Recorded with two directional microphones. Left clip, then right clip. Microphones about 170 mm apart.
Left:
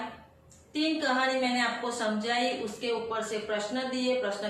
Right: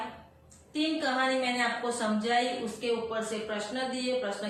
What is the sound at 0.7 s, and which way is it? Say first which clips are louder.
A woman's voice: left 2 dB; 20° left (ahead or behind).